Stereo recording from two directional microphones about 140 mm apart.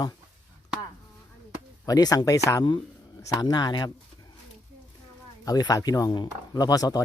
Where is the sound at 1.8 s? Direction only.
25° left (ahead or behind).